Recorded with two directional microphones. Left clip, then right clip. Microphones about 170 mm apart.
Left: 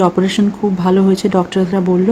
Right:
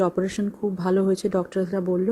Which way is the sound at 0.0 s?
20° right (ahead or behind).